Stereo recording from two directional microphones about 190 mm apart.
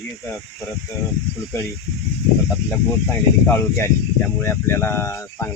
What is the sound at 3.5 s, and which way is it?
Speech, 10° left (ahead or behind).